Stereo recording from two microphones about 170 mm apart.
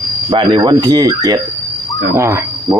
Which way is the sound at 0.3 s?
30° right (ahead or behind).